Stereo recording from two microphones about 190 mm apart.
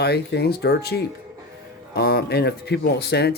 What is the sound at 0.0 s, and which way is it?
Speech, 60° left (ahead or behind).